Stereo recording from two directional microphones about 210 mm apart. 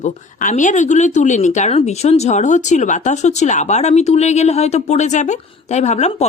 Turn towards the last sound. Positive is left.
turn(degrees=30)  # may be behind; listen again after turning